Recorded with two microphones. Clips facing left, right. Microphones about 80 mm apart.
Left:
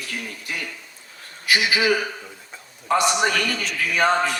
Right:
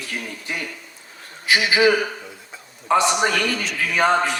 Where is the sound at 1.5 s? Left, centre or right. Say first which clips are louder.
Right 3 dB; right.